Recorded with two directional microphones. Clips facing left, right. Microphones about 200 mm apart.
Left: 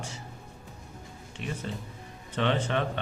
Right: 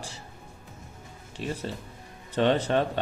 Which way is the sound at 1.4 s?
35° right (ahead or behind).